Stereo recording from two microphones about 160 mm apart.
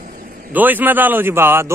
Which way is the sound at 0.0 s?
60° right (ahead or behind).